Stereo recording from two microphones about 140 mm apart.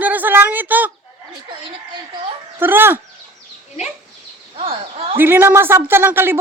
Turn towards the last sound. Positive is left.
turn(degrees=-15)  # may be behind; listen again after turning